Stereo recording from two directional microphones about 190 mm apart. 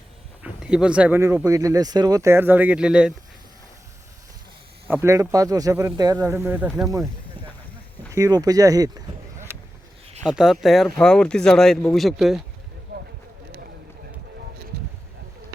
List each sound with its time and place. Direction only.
0.4 s speech: 5° right (ahead or behind)
4.9 s speech: 15° right (ahead or behind)
6.7 s speech: centre (ahead or behind)
8.1 s speech: 20° right (ahead or behind)
10.2 s speech: centre (ahead or behind)
12.9 s a sound: 55° right (ahead or behind)